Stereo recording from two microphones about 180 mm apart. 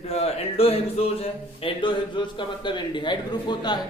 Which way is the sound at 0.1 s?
35° left (ahead or behind).